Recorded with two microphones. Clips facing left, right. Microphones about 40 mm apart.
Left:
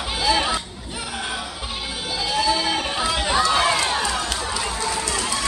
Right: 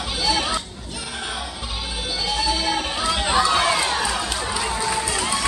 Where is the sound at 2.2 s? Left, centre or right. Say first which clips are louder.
Left 2 dB; centre.